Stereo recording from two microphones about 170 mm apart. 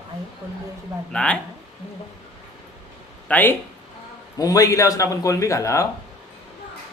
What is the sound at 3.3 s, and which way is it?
A man's voice, 10° left (ahead or behind).